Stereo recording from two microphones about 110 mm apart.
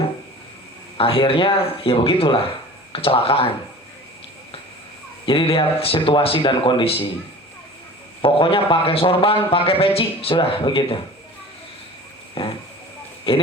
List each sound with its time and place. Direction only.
0.9 s a man's voice: 55° left (ahead or behind)
5.2 s a man's voice: 55° left (ahead or behind)
8.2 s a man's voice: 55° left (ahead or behind)
12.4 s a sound: 55° left (ahead or behind)
13.3 s a man's voice: 55° left (ahead or behind)